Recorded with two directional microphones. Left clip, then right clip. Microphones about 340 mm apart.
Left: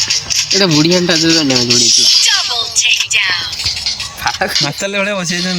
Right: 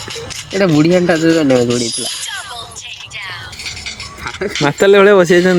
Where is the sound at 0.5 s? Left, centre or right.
Centre.